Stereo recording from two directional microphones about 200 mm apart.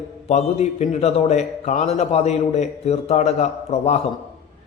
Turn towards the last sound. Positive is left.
turn(degrees=35)  # may be behind; listen again after turning